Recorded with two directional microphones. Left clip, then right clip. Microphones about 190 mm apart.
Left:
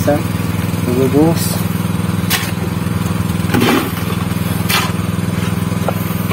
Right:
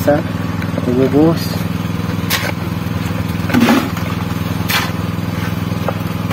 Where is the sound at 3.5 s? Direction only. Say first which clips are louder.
Right 1 dB; 60° right (ahead or behind).